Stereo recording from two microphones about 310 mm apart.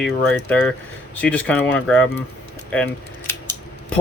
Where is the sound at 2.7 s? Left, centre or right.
Centre.